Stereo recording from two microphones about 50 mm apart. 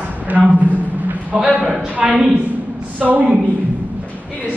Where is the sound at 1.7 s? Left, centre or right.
Right.